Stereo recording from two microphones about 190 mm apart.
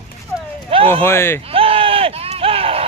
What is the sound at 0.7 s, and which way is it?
Speech, 30° right (ahead or behind).